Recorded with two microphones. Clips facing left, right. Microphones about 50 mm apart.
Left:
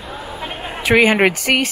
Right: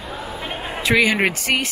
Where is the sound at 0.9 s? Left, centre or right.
Left.